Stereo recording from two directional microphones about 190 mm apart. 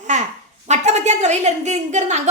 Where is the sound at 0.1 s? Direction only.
40° right (ahead or behind).